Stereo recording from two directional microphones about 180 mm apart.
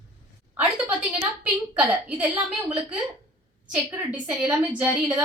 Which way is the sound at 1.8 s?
10° right (ahead or behind).